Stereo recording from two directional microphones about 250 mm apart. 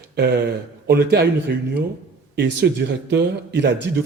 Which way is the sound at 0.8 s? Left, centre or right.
Right.